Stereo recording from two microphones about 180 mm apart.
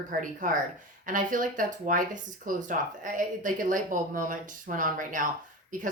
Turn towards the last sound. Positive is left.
turn(degrees=-45)  # may be behind; listen again after turning